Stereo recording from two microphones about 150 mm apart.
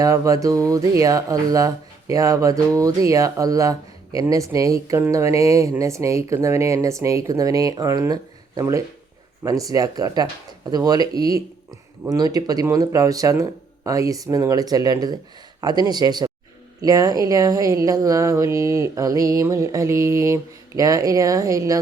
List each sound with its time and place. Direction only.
0.0 s speech: 20° right (ahead or behind)